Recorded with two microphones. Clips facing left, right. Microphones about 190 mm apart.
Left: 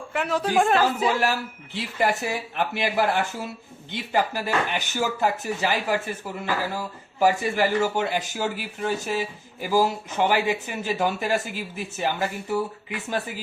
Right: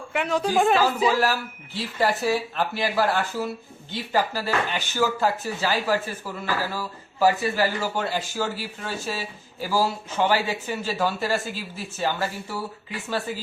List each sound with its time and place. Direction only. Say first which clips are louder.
0.1 s a sound: right 1 dB; 5° left (ahead or behind)
0.4 s speech: even; centre (ahead or behind)
1.2 s a man's voice: right 1 dB; 20° left (ahead or behind)